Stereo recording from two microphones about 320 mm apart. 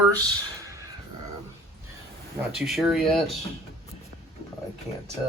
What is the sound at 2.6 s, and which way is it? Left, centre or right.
Speech, centre.